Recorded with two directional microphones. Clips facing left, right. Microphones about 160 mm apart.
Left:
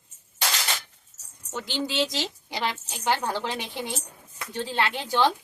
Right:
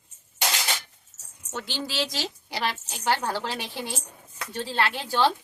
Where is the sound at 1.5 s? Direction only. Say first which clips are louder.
Left 3 dB; 15° left (ahead or behind).